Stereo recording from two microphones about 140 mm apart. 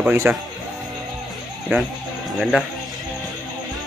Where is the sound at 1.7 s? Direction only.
15° right (ahead or behind).